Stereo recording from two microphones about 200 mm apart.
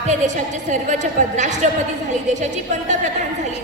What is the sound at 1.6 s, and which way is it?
Speech, 35° right (ahead or behind).